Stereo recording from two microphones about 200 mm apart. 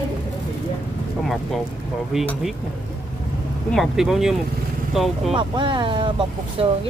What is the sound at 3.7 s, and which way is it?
Speech, centre (ahead or behind).